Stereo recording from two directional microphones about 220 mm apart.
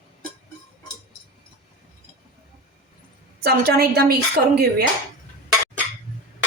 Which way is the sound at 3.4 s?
45° right (ahead or behind).